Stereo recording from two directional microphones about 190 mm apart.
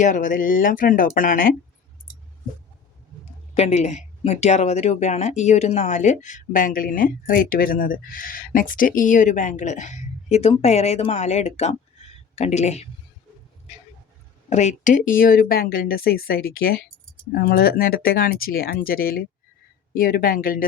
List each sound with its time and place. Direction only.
0.0 s speech: 45° left (ahead or behind)
3.5 s speech: 35° left (ahead or behind)
14.5 s speech: 40° left (ahead or behind)